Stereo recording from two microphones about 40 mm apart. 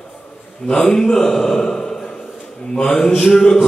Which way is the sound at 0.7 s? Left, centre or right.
Centre.